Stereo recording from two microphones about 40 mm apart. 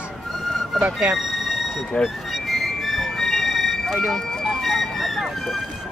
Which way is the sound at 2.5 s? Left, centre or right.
Centre.